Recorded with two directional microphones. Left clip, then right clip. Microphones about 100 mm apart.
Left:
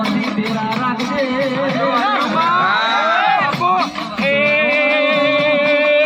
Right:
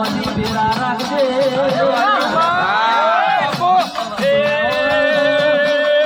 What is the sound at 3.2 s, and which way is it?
Music, 30° right (ahead or behind).